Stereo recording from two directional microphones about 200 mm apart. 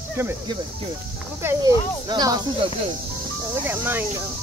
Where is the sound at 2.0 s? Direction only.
20° right (ahead or behind).